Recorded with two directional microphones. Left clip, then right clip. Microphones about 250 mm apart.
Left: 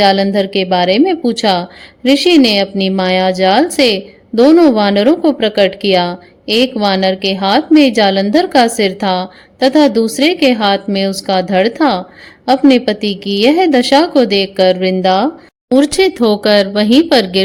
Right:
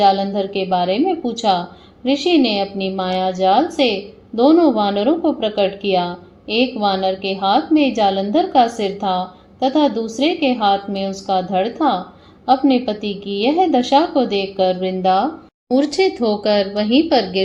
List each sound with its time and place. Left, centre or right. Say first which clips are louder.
0.0 s a woman's voice: left 4 dB; left